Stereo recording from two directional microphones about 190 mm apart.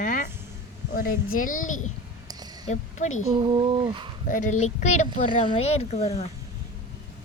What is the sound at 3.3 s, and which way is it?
Speech, 25° right (ahead or behind).